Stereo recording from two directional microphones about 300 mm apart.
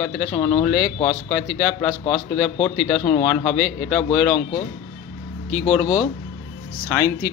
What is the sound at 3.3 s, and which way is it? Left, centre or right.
Speech, centre.